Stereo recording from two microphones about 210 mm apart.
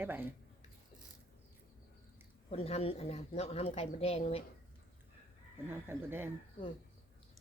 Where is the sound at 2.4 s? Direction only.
30° left (ahead or behind).